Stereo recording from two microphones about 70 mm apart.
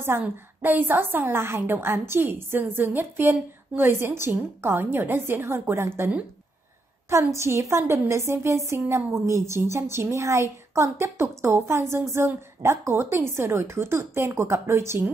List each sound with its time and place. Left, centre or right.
0.2 s a woman's voice: right
7.3 s a woman's voice: right